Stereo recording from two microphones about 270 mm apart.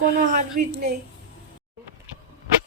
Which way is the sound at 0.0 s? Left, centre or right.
Right.